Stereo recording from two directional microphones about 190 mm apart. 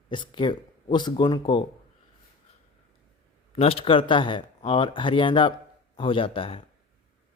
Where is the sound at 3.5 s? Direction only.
30° left (ahead or behind).